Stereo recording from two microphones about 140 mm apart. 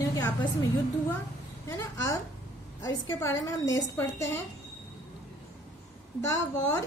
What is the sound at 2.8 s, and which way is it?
A woman's voice, 20° left (ahead or behind).